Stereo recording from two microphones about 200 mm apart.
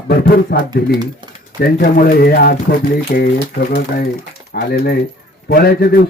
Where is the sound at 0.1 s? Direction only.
50° left (ahead or behind).